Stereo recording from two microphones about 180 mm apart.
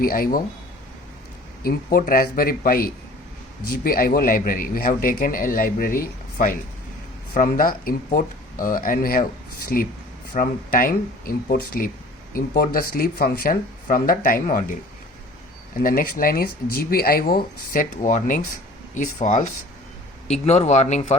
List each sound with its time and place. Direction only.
0.0 s a man's voice: 50° left (ahead or behind)
1.6 s a man's voice: 55° left (ahead or behind)
15.8 s a man's voice: 50° left (ahead or behind)